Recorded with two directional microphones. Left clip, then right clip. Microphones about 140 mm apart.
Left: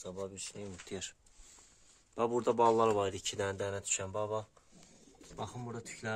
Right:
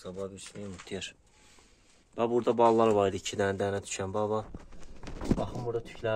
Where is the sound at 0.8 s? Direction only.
25° left (ahead or behind).